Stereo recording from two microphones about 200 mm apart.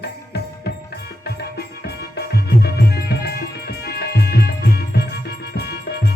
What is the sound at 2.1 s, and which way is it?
Music, 55° left (ahead or behind).